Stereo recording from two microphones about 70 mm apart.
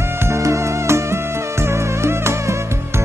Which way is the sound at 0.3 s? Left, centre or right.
Right.